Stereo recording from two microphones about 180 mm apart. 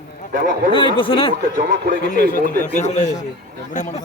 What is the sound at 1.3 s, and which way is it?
Speech, 50° right (ahead or behind).